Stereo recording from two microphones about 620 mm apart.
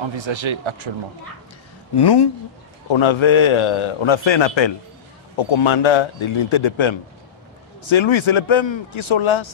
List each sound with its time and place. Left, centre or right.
0.0 s speech: right
2.0 s a man's voice: left